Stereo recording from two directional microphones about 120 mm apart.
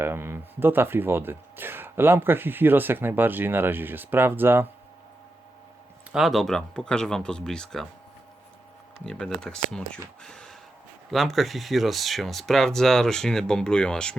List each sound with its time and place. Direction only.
0.0 s speech: 20° right (ahead or behind)
6.1 s speech: 5° right (ahead or behind)
9.0 s speech: 5° left (ahead or behind)
10.2 s a sound: 5° left (ahead or behind)
11.1 s speech: centre (ahead or behind)